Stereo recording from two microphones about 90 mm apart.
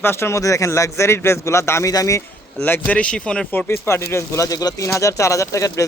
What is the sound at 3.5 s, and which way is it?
Speech, 25° left (ahead or behind).